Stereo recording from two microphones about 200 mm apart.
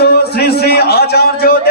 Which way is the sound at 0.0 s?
50° left (ahead or behind).